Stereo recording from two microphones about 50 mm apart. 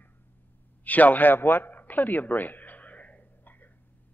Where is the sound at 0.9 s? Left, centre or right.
Left.